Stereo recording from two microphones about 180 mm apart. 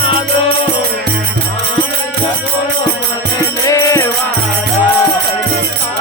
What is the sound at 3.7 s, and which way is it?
Music, 20° left (ahead or behind).